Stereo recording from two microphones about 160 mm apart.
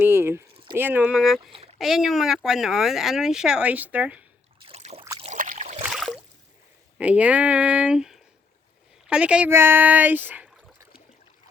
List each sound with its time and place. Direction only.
0.0 s squish: 15° right (ahead or behind)
0.8 s speech: 10° right (ahead or behind)
4.6 s trickle: 40° right (ahead or behind)
5.4 s trickle: 55° right (ahead or behind)
5.8 s a sound: centre (ahead or behind)
7.0 s speech: 10° right (ahead or behind)